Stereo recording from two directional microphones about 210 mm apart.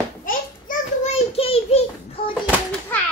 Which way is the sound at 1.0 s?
30° left (ahead or behind).